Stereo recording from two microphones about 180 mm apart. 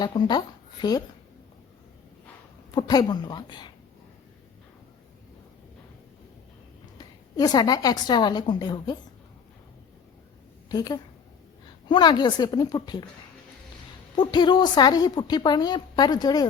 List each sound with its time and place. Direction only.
0.0 s a woman's voice: 25° left (ahead or behind)
2.7 s a woman's voice: 20° left (ahead or behind)
7.0 s a woman's voice: 20° left (ahead or behind)
10.7 s a woman's voice: 20° left (ahead or behind)
14.2 s a woman's voice: 25° left (ahead or behind)